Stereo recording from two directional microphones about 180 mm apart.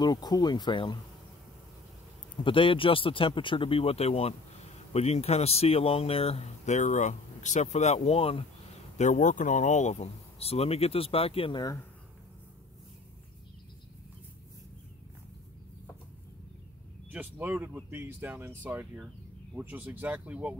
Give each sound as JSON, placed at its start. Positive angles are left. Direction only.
{"t": 0.0, "sound": "speech", "side_deg": 20}
{"t": 2.3, "sound": "speech", "side_deg": 30}
{"t": 17.1, "sound": "speech", "side_deg": -10}